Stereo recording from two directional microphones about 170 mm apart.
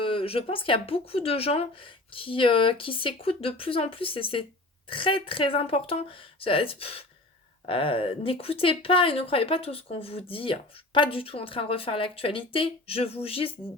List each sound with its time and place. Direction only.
0.0 s speech: 30° left (ahead or behind)